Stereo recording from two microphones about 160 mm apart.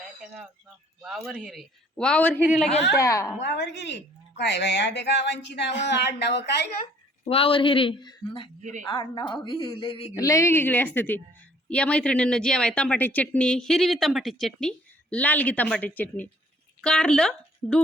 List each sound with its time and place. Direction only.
1.3 s a man's voice: centre (ahead or behind)
2.9 s a woman's voice: 20° left (ahead or behind)
3.4 s speech: 90° left
7.3 s speech: 35° left (ahead or behind)
10.2 s speech: 20° left (ahead or behind); by 17.7 s 5° left (ahead or behind)